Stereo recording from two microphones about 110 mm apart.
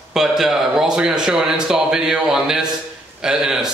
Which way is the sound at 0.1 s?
5° right (ahead or behind).